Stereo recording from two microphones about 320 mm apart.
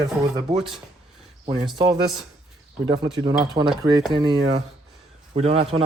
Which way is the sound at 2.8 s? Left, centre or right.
Centre.